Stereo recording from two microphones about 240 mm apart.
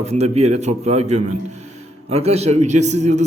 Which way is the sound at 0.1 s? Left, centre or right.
Right.